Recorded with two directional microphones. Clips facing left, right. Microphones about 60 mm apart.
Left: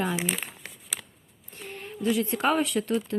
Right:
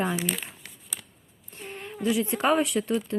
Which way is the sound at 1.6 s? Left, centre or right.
Right.